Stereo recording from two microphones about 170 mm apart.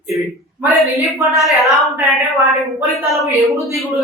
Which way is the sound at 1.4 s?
Centre (ahead or behind).